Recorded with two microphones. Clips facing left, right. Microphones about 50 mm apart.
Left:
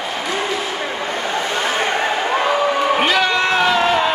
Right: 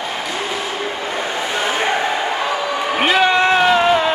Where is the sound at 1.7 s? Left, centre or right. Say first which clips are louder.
Right 2 dB; centre.